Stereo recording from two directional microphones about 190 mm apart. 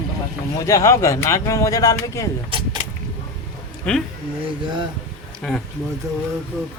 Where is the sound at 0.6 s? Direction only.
20° left (ahead or behind).